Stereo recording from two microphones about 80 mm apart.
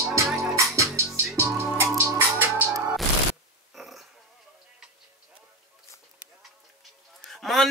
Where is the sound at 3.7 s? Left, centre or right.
Centre.